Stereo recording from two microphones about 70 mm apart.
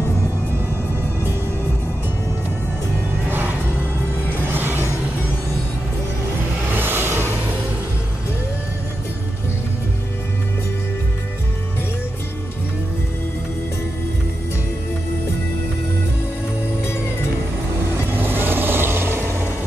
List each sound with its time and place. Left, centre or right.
3.3 s music: right
4.5 s a sound: right
6.7 s vehicle: right
18.1 s vehicle: right